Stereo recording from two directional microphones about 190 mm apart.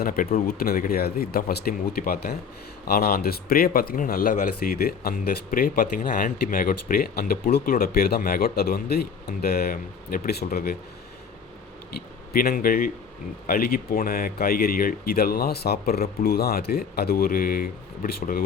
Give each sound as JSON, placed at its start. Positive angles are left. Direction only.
{"t": 0.0, "sound": "speech", "side_deg": 50}
{"t": 12.3, "sound": "speech", "side_deg": 50}